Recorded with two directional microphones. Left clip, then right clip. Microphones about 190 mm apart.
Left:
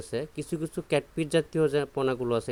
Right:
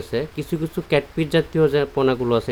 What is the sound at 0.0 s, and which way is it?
Speech, 35° left (ahead or behind).